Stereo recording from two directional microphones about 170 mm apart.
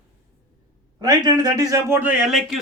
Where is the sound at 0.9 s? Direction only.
25° right (ahead or behind); by 2.4 s 5° right (ahead or behind).